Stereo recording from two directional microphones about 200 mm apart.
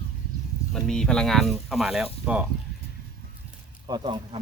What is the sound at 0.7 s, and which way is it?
Speech, centre (ahead or behind).